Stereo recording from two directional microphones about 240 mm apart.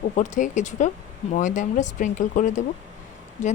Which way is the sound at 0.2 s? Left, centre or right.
Left.